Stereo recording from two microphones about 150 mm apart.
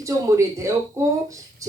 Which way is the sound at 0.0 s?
20° right (ahead or behind).